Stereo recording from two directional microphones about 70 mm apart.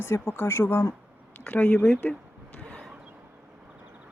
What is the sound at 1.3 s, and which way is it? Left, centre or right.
Speech, left.